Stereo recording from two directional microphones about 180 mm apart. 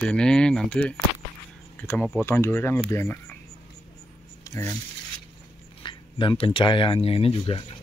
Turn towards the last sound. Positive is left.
turn(degrees=30)  # may be behind; listen again after turning